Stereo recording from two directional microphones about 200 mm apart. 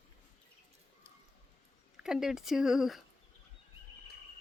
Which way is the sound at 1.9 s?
5° right (ahead or behind).